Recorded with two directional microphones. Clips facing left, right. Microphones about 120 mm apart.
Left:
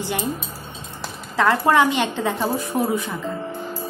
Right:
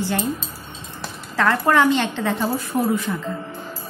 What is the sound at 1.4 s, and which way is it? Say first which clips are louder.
Speech: left 1 dB; 20° left (ahead or behind).